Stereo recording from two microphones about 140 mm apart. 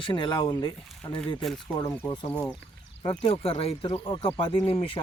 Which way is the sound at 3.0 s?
40° left (ahead or behind).